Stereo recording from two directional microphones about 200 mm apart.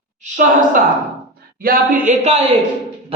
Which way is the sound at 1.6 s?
45° right (ahead or behind).